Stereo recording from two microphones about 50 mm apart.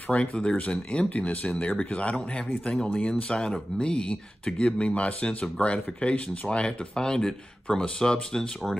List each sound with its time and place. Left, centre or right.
0.1 s speech: centre
2.7 s speech: centre